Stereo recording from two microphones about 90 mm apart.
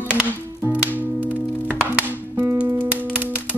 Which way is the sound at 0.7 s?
20° right (ahead or behind).